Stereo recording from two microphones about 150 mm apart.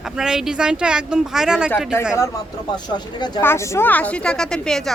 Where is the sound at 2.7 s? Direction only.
30° left (ahead or behind).